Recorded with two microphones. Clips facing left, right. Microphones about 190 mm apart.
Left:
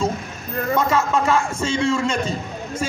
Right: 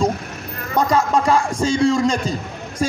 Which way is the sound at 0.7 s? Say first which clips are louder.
Right 3 dB; 35° right (ahead or behind).